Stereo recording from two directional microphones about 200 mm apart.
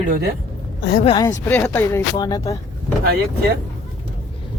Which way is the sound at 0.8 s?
50° left (ahead or behind).